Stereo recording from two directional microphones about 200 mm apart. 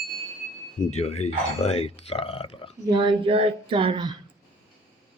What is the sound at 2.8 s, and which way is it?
Speech, 20° right (ahead or behind).